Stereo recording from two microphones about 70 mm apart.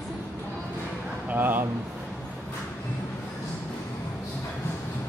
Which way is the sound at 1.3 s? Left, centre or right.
Right.